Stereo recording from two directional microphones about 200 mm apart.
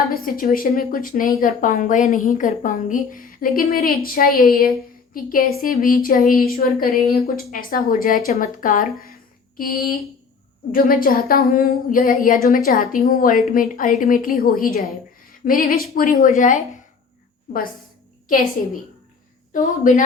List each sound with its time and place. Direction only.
0.1 s speech: 45° left (ahead or behind)
19.5 s speech: 40° left (ahead or behind)